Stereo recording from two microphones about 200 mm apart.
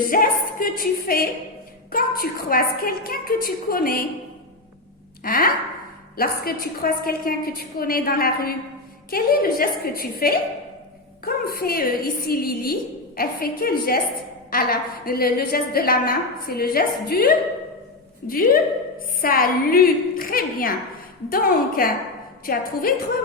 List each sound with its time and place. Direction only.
0.1 s a woman's voice: 45° left (ahead or behind)
5.2 s a woman's voice: 45° left (ahead or behind)